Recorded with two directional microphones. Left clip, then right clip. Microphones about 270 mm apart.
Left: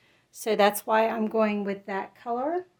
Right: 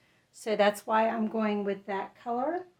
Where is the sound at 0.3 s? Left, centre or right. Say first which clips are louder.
Left 3 dB; left.